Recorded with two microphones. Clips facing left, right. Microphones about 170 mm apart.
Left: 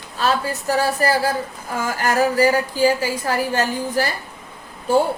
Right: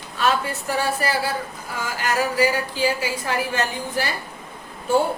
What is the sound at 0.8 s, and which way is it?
A woman's voice, 40° left (ahead or behind).